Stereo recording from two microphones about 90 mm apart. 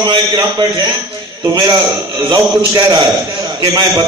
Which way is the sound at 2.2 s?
40° right (ahead or behind).